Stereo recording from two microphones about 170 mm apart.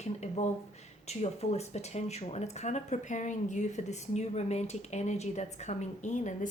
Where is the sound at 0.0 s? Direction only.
40° left (ahead or behind).